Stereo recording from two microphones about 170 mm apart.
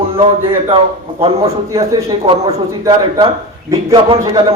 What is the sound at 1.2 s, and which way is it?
Speech, 35° right (ahead or behind).